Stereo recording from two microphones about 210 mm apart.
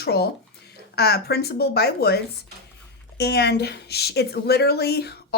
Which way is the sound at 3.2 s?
50° left (ahead or behind).